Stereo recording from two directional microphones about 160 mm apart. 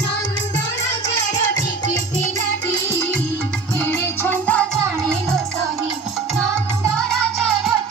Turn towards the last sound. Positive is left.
turn(degrees=5)  # may be behind; listen again after turning